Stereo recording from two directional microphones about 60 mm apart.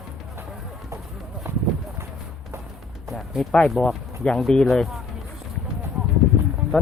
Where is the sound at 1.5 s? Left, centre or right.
Right.